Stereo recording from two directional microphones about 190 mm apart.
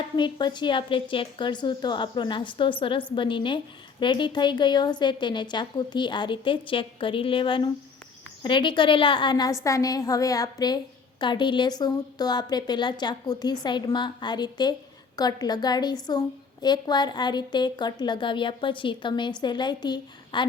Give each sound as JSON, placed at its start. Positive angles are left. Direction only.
{"t": 0.2, "sound": "a woman's voice", "side_deg": 25}